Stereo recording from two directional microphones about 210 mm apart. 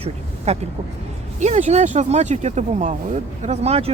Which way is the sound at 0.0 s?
30° right (ahead or behind).